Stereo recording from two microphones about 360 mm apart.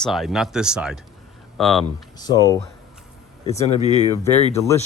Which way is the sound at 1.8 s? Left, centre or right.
Centre.